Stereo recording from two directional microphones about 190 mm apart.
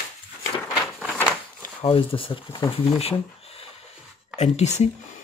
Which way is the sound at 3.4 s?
30° left (ahead or behind).